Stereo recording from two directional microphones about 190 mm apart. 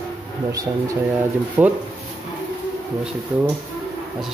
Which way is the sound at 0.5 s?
15° right (ahead or behind).